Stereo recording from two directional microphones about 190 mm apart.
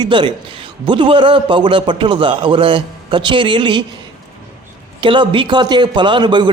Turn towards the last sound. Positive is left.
turn(degrees=-25)  # may be behind; listen again after turning